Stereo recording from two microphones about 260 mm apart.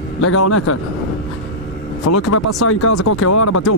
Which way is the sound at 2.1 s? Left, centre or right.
Left.